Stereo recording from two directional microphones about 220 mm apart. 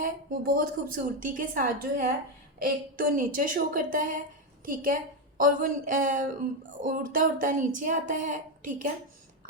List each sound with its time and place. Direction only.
0.0 s a woman's voice: 40° right (ahead or behind)